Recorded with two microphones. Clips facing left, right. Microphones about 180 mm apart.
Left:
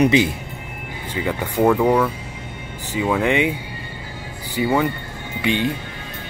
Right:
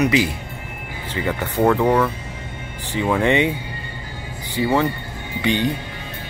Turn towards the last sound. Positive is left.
turn(degrees=0)  # may be behind; listen again after turning